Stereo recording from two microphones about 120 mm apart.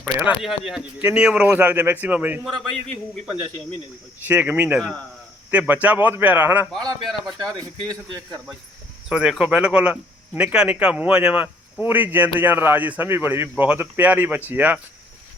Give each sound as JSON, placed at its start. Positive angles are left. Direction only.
{"t": 0.0, "sound": "a man's voice", "side_deg": -15}
{"t": 0.4, "sound": "a man's voice", "side_deg": -5}
{"t": 4.3, "sound": "a man's voice", "side_deg": -15}
{"t": 7.0, "sound": "speech", "side_deg": 0}
{"t": 7.3, "sound": "speech", "side_deg": -35}
{"t": 9.0, "sound": "a man's voice", "side_deg": -5}